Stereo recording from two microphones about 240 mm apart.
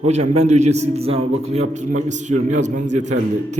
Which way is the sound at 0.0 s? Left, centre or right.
Right.